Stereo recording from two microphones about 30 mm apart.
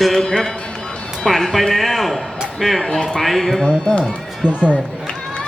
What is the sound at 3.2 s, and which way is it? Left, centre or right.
Speech, centre.